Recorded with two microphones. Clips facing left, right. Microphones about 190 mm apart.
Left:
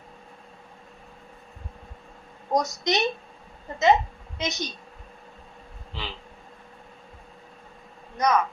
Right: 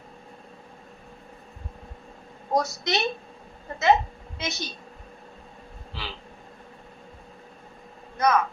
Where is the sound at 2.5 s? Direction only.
15° left (ahead or behind).